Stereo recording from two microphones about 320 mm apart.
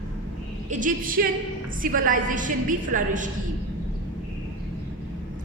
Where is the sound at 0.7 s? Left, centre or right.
Right.